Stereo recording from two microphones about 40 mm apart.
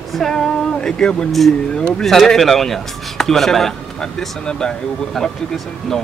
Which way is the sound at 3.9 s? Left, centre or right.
Left.